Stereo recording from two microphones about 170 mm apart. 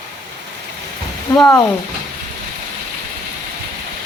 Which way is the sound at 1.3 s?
5° left (ahead or behind).